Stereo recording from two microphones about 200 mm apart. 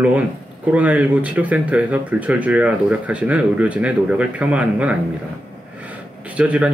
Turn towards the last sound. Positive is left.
turn(degrees=-5)  # may be behind; listen again after turning